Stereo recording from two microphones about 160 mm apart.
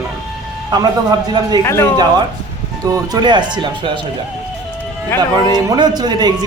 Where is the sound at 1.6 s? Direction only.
15° left (ahead or behind).